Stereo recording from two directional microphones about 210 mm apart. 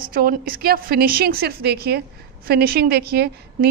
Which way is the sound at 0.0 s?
45° right (ahead or behind).